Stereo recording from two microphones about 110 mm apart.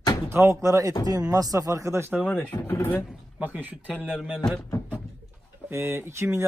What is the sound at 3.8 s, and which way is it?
Speech, 10° left (ahead or behind).